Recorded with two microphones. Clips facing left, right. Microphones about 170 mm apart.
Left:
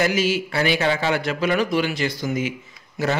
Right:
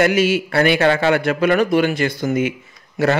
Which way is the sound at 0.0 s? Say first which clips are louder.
Right 5 dB; 60° right (ahead or behind).